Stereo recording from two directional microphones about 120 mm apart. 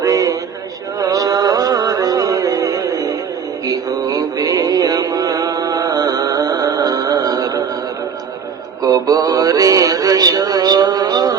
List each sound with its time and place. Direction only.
0.0 s a sound: 30° right (ahead or behind)
0.9 s music: 30° right (ahead or behind)
8.8 s male singing: 35° right (ahead or behind)